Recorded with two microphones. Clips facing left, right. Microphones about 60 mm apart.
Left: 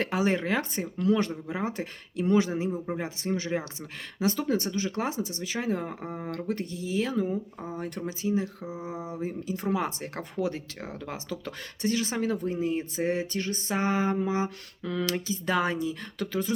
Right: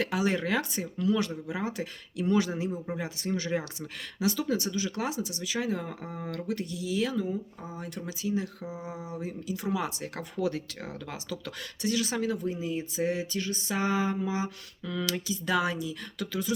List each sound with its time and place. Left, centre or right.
0.0 s a man's voice: left